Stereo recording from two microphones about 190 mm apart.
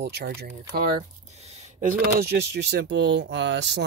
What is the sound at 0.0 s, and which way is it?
Speech, 55° right (ahead or behind).